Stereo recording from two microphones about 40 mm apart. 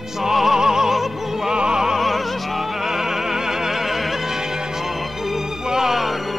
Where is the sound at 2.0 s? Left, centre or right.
Centre.